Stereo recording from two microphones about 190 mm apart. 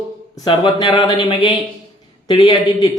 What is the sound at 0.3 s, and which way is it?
Speech, 25° left (ahead or behind).